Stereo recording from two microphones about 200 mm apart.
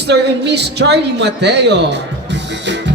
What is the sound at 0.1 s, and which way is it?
A woman's voice, 55° right (ahead or behind).